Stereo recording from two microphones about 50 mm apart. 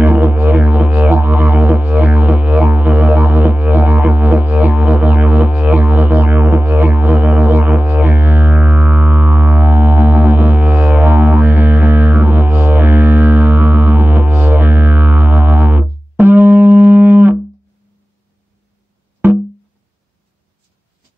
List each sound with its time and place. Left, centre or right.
0.0 s music: right
19.2 s music: right